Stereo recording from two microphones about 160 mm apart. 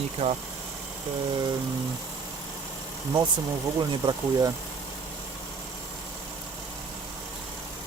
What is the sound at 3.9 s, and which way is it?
Speech, 30° right (ahead or behind).